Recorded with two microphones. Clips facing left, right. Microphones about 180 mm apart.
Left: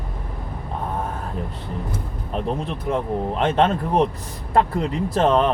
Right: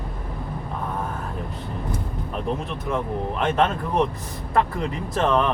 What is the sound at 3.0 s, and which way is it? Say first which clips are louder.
Speech: left 3 dB; 30° left (ahead or behind).